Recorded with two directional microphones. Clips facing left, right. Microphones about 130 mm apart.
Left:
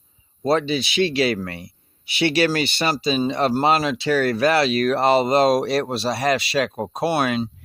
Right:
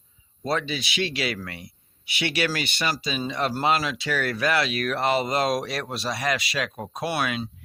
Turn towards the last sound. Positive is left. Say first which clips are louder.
# left 6 dB
turn(degrees=35)  # may be behind; listen again after turning